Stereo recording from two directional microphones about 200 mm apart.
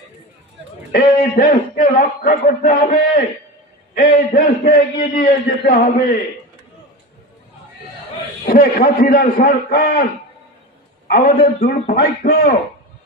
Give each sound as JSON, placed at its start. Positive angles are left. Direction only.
{"t": 0.9, "sound": "a man's voice", "side_deg": 45}
{"t": 8.5, "sound": "a man's voice", "side_deg": 45}
{"t": 11.1, "sound": "a man's voice", "side_deg": 45}